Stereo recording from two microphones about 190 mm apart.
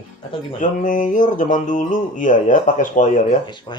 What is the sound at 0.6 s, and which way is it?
Mantra, 45° left (ahead or behind).